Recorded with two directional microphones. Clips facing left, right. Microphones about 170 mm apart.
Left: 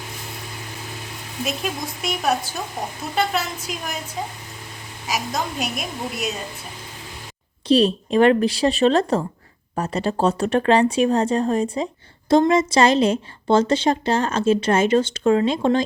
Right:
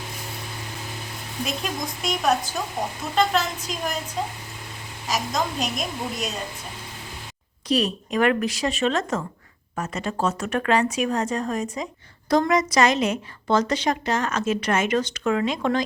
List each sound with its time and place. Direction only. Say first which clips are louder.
1.5 s a woman's voice: left 3 dB; 5° left (ahead or behind)
5.0 s a woman's voice: even; 10° left (ahead or behind)
7.7 s a woman's voice: left 6 dB; 30° left (ahead or behind)